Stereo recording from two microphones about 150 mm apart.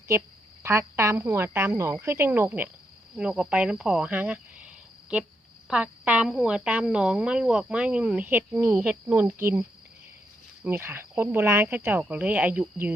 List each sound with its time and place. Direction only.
0.6 s speech: 15° right (ahead or behind)
3.2 s cricket: 5° right (ahead or behind)
5.6 s speech: 10° right (ahead or behind)